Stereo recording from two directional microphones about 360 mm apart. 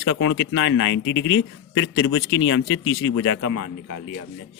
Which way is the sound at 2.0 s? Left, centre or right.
Left.